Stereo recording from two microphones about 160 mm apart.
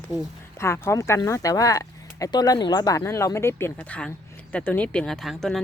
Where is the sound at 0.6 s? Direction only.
15° left (ahead or behind).